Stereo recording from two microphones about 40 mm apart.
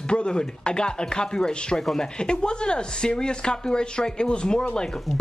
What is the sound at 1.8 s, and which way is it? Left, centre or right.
Speech, centre.